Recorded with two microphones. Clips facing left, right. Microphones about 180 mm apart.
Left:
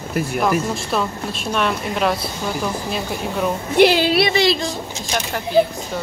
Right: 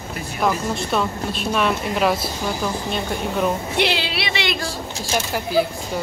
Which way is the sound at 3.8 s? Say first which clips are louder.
Left 11 dB; 45° left (ahead or behind).